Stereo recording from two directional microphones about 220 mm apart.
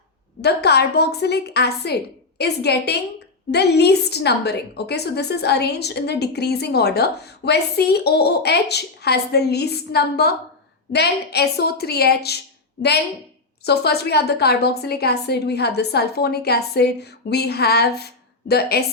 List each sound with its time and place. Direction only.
0.4 s a woman's voice: 50° left (ahead or behind)
13.7 s a woman's voice: 45° left (ahead or behind)